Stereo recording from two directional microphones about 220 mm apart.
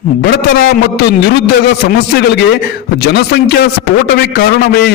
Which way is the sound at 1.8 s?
45° left (ahead or behind).